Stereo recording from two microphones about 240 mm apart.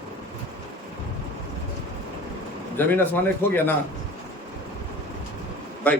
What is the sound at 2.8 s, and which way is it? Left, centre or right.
Speech, centre.